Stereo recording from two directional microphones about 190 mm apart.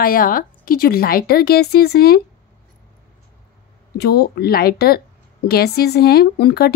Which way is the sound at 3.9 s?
55° left (ahead or behind).